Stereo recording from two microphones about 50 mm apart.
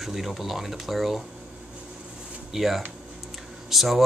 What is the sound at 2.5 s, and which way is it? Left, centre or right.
Speech, centre.